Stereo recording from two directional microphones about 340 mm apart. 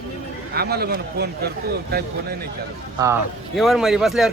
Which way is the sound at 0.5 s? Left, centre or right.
Right.